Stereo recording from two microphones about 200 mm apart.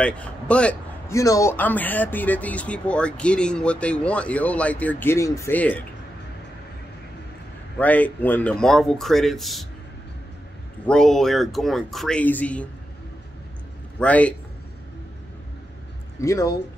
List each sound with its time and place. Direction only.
0.0 s a man's voice: 5° left (ahead or behind)
7.8 s speech: 10° left (ahead or behind)
10.9 s speech: centre (ahead or behind)
13.9 s a man's voice: 5° left (ahead or behind)
16.2 s a man's voice: 15° left (ahead or behind)